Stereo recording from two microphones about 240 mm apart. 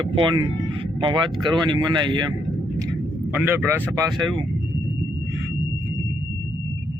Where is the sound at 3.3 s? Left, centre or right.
Centre.